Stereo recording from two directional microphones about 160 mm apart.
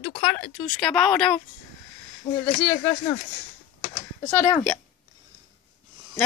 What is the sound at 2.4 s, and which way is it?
Speech, 10° left (ahead or behind).